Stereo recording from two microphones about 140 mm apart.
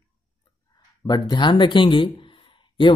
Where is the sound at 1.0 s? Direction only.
30° left (ahead or behind).